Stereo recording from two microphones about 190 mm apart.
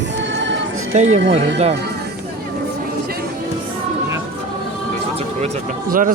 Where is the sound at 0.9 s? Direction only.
40° right (ahead or behind).